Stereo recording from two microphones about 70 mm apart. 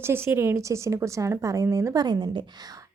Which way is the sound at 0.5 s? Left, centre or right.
Right.